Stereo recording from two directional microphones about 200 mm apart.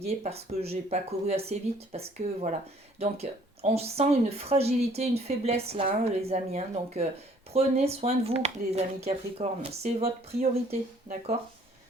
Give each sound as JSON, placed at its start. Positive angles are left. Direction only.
{"t": 0.0, "sound": "speech", "side_deg": -30}